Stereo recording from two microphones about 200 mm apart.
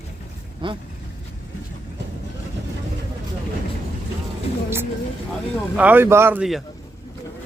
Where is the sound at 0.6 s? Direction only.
25° right (ahead or behind).